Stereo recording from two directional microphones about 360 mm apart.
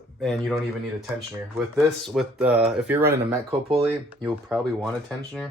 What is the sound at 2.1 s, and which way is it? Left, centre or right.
Speech, centre.